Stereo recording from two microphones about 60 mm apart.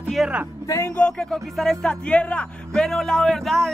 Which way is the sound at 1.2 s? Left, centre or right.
Centre.